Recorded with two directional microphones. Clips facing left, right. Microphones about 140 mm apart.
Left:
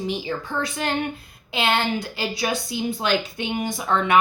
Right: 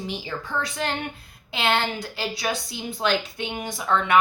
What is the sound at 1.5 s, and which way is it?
A woman's voice, 15° left (ahead or behind).